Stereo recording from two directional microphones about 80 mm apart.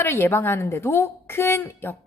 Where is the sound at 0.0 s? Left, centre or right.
Left.